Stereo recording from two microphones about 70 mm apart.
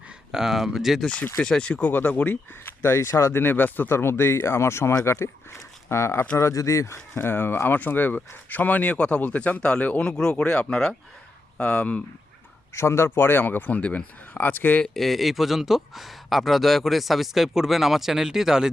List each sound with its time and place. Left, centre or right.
0.3 s speech: centre
1.4 s speech: centre
12.7 s speech: left
14.9 s speech: centre